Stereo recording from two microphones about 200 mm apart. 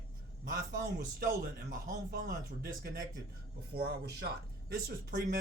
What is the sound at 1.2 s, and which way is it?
A man's voice, 40° right (ahead or behind).